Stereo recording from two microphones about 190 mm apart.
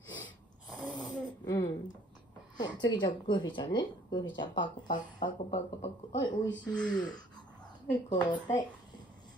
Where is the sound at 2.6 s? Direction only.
20° left (ahead or behind).